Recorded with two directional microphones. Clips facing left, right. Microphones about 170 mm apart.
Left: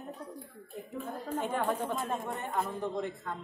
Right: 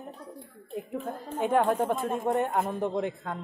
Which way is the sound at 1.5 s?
60° right (ahead or behind).